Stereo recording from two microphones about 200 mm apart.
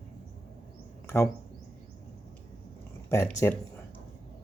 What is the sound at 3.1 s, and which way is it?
Speech, 15° left (ahead or behind).